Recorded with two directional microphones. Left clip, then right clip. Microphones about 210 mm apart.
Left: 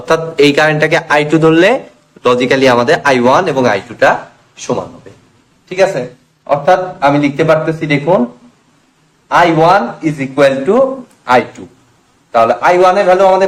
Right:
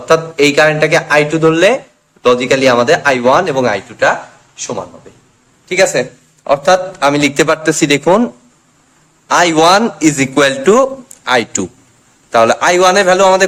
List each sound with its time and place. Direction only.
0.1 s speech: 5° left (ahead or behind); by 4.9 s 15° right (ahead or behind)
5.6 s speech: 40° right (ahead or behind)
6.5 s a man's voice: 55° right (ahead or behind)
9.3 s a man's voice: 55° right (ahead or behind)